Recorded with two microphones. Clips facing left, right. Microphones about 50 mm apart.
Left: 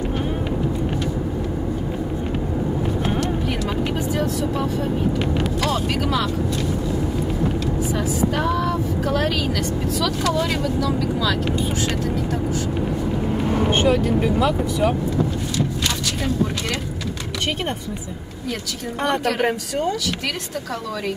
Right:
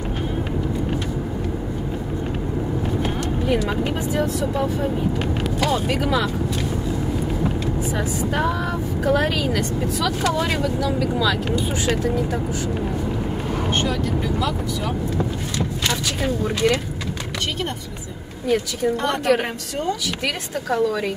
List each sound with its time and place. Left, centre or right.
4.1 s speech: centre
5.7 s speech: centre
9.0 s speech: centre
13.7 s speech: centre